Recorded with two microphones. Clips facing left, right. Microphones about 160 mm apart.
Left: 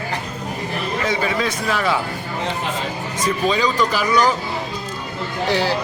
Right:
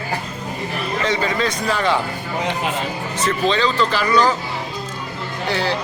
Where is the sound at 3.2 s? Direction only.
10° left (ahead or behind).